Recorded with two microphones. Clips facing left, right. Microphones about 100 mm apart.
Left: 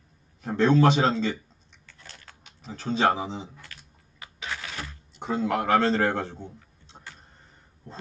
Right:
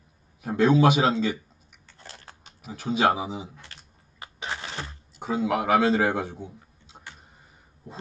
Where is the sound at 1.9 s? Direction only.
35° right (ahead or behind).